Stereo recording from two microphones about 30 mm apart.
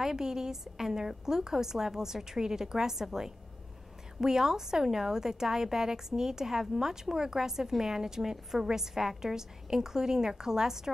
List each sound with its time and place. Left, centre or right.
0.0 s a woman's voice: centre